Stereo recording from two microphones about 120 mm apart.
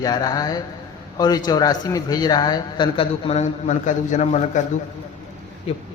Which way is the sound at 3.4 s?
90° left.